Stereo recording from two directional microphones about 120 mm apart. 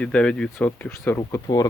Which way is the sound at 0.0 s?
10° left (ahead or behind).